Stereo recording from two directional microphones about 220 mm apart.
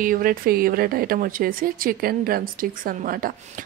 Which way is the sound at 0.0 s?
40° right (ahead or behind).